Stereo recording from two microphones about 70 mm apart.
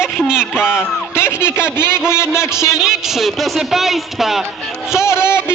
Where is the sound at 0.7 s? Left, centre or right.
Left.